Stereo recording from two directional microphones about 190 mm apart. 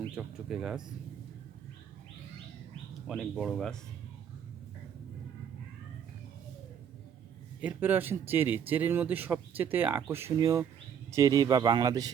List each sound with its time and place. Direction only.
0.2 s speech: centre (ahead or behind)
3.1 s speech: centre (ahead or behind)
7.6 s speech: 10° right (ahead or behind)